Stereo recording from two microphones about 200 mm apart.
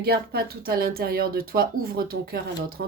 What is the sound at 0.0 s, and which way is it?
Speech, 50° right (ahead or behind).